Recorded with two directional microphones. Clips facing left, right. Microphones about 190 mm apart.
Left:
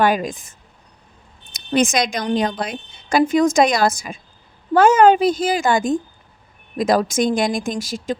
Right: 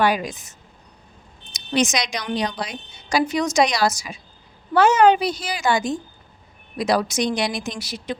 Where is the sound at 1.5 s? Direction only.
55° left (ahead or behind).